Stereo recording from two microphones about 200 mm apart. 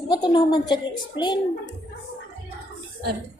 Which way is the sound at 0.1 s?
20° left (ahead or behind).